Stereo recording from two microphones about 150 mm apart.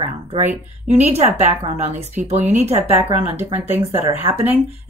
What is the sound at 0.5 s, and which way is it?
A woman's voice, 50° right (ahead or behind).